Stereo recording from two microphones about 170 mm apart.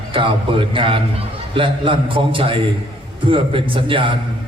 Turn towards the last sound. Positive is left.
turn(degrees=-30)  # may be behind; listen again after turning